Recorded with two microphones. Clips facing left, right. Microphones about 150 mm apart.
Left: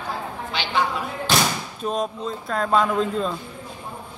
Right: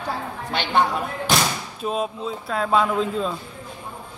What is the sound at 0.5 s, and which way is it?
Speech, 55° right (ahead or behind).